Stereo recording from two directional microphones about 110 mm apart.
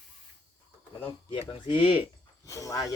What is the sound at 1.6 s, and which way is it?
Speech, 50° left (ahead or behind).